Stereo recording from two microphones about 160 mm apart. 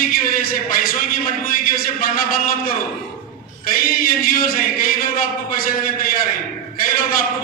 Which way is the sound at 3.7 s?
65° left (ahead or behind).